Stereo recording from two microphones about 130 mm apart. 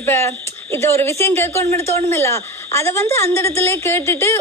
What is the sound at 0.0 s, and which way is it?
A woman's voice, 15° left (ahead or behind).